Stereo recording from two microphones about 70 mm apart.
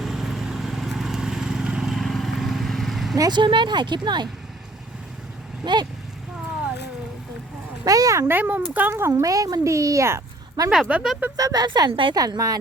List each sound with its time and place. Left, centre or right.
0.0 s vehicle: centre
3.2 s speech: right
5.6 s speech: right
7.9 s a woman's voice: right
8.3 s speech: right
9.0 s speech: right
9.2 s speech: right
10.6 s a woman's voice: right